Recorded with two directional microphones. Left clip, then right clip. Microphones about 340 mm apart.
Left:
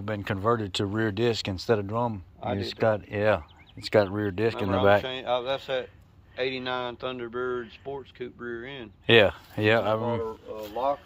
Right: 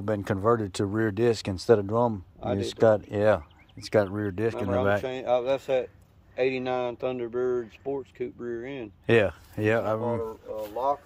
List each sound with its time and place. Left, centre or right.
0.0 s speech: centre
5.0 s speech: right
9.0 s speech: centre